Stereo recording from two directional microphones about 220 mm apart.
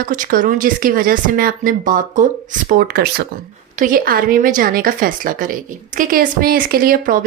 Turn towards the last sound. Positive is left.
turn(degrees=-40)  # may be behind; listen again after turning